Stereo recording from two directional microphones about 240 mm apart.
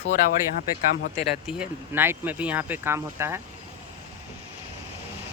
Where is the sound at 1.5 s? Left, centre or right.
Centre.